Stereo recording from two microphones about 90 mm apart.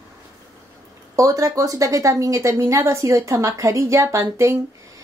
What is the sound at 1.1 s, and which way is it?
Speech, 40° right (ahead or behind).